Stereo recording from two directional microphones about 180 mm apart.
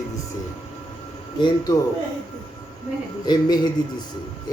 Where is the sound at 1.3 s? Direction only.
25° left (ahead or behind).